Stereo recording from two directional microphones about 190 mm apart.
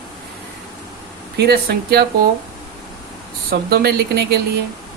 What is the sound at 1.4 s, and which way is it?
Speech, 55° right (ahead or behind).